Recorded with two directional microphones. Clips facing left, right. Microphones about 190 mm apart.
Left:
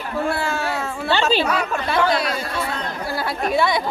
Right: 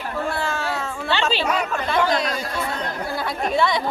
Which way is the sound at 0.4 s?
10° left (ahead or behind).